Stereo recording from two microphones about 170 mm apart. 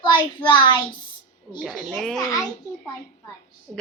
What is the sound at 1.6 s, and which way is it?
Speech, 5° left (ahead or behind).